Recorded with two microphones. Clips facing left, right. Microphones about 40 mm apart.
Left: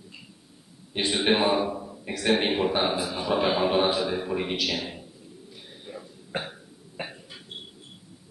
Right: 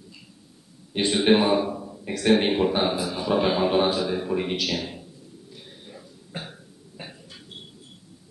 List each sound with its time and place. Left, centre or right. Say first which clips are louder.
0.9 s a man's voice: right 4 dB; centre
5.5 s a sound: left 4 dB; centre
6.3 s cough: left 5 dB; left
7.0 s cough: left 4 dB; centre